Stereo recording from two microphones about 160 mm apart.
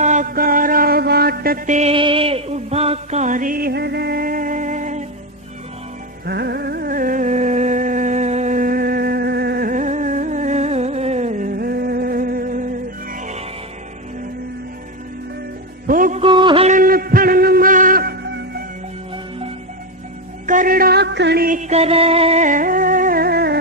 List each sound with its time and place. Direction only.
0.0 s mantra: 50° right (ahead or behind)
1.9 s music: 35° right (ahead or behind); by 5.0 s 50° right (ahead or behind)
6.2 s music: 90° right; by 13.4 s 50° right (ahead or behind)
15.9 s music: 55° right (ahead or behind)
16.2 s music: 30° right (ahead or behind)
16.6 s music: 60° right (ahead or behind)
20.5 s music: 60° right (ahead or behind); by 23.6 s 80° right